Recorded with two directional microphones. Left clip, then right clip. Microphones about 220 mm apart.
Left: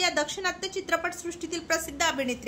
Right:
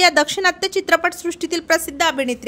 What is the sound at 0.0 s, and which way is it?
A woman's voice, 40° right (ahead or behind).